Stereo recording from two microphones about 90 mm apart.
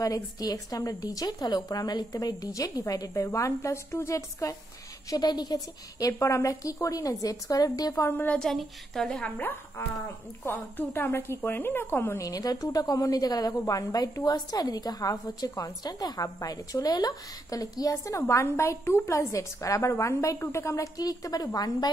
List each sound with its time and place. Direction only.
0.0 s a woman's voice: 40° left (ahead or behind)
5.1 s a woman's voice: 50° left (ahead or behind)
8.1 s a woman's voice: 20° left (ahead or behind)
8.4 s a woman's voice: 5° left (ahead or behind)
9.4 s a woman's voice: 20° left (ahead or behind)
12.2 s a woman's voice: 40° left (ahead or behind)